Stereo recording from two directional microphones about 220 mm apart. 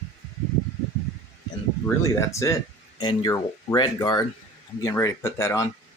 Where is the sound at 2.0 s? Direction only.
15° left (ahead or behind).